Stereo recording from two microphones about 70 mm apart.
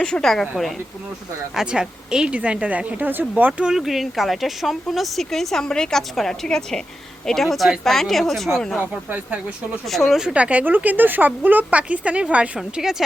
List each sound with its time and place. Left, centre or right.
0.0 s speech: centre
1.5 s a woman's voice: centre; by 3.5 s right
3.6 s speech: centre
8.8 s speech: right
9.8 s speech: centre
10.2 s a woman's voice: centre